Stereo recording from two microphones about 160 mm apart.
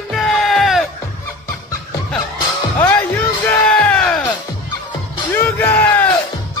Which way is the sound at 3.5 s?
10° left (ahead or behind).